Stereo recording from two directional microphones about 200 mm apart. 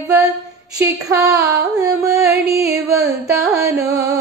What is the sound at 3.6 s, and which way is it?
Carnatic music, 15° right (ahead or behind).